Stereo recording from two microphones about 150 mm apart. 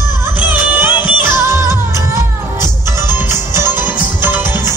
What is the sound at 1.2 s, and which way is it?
Music, 15° right (ahead or behind).